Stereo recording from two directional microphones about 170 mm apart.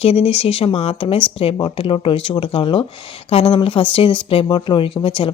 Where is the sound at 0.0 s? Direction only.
35° left (ahead or behind).